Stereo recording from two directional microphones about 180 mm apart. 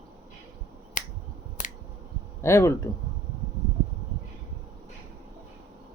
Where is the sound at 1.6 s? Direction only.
45° left (ahead or behind).